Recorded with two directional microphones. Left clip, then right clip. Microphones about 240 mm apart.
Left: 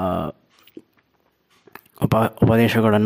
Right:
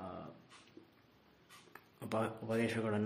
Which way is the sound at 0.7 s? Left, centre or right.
Left.